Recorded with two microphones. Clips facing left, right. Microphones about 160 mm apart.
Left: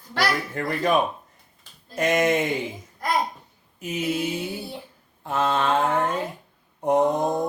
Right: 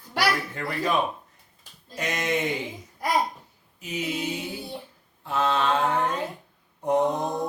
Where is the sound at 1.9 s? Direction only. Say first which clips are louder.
Left 7 dB; 50° left (ahead or behind).